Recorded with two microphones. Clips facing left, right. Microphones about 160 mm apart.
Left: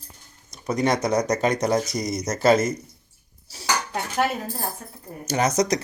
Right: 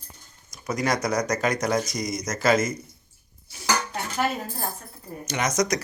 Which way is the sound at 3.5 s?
35° left (ahead or behind).